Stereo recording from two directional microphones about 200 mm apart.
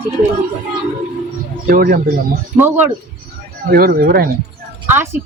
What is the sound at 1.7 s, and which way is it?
Speech, 45° right (ahead or behind).